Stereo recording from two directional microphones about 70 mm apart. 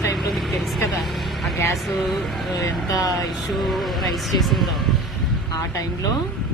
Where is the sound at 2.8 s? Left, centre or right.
Left.